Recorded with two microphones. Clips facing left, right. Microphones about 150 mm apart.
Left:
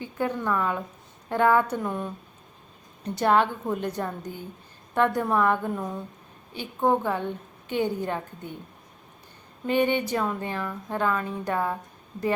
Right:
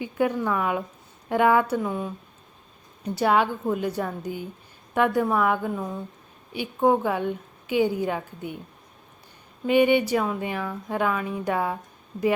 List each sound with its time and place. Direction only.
0.0 s a woman's voice: 15° right (ahead or behind)
6.5 s speech: 10° right (ahead or behind)
9.6 s speech: 10° right (ahead or behind)